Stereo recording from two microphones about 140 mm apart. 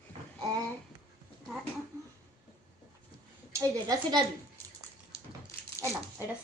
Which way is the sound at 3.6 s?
25° right (ahead or behind).